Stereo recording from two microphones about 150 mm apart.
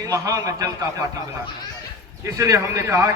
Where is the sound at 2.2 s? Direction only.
20° right (ahead or behind).